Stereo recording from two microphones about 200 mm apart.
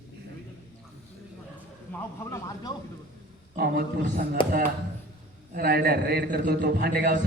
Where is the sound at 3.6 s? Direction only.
50° right (ahead or behind).